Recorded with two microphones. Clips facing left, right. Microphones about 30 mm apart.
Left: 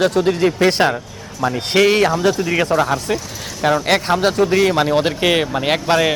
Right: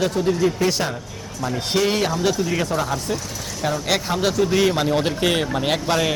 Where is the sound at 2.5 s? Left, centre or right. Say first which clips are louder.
Left 5 dB; left.